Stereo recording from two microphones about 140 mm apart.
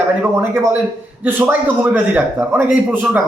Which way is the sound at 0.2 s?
15° right (ahead or behind).